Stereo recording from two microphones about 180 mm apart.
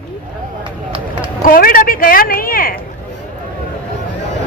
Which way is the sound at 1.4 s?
50° left (ahead or behind).